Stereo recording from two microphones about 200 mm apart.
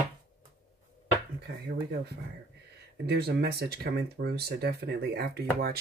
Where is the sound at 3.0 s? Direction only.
55° right (ahead or behind).